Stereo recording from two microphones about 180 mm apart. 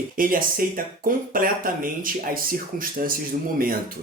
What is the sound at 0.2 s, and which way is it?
Speech, 50° right (ahead or behind).